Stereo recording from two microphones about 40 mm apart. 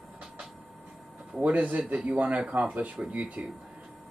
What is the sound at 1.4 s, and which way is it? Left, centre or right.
A man's voice, right.